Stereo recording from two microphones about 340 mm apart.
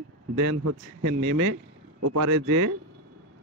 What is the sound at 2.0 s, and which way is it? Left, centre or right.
Speech, right.